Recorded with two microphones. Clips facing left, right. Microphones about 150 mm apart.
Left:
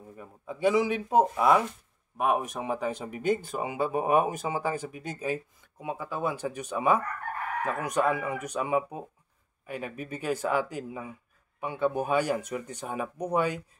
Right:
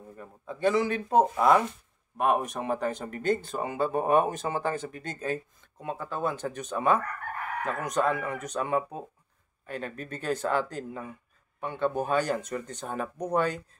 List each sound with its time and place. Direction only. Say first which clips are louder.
0.1 s speech: left 1 dB; 10° left (ahead or behind)